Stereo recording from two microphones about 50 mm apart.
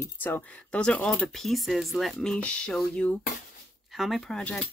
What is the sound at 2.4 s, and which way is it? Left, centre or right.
Speech, centre.